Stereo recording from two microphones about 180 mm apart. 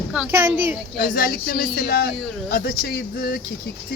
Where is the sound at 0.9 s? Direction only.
55° left (ahead or behind).